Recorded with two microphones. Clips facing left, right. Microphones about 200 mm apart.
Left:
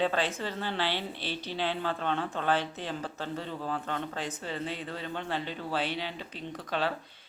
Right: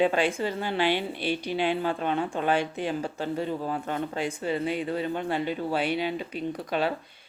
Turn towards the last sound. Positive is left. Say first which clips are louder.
# right 5 dB
turn(degrees=-15)  # may be behind; listen again after turning